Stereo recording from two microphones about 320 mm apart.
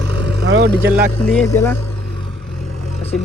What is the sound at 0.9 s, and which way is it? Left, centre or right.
Speech, centre.